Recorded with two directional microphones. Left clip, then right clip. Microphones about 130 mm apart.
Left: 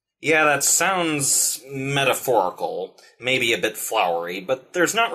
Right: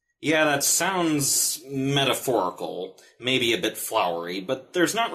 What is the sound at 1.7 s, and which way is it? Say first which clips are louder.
Speech: left 2 dB; 30° right (ahead or behind).